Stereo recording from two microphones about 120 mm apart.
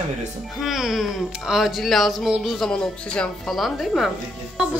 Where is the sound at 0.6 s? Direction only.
Centre (ahead or behind).